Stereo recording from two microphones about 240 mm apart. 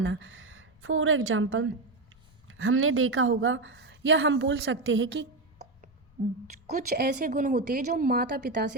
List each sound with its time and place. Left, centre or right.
0.0 s a woman's voice: right
6.7 s a woman's voice: right